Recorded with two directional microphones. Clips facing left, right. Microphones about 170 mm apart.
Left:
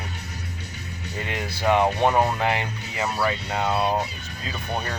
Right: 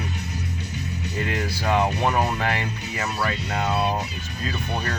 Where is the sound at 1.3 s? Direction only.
20° left (ahead or behind).